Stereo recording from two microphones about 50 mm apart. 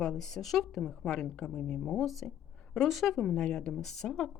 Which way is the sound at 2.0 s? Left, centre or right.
Centre.